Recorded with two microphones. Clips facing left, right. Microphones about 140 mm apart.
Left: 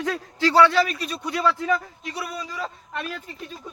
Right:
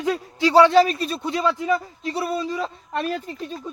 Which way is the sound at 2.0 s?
30° right (ahead or behind).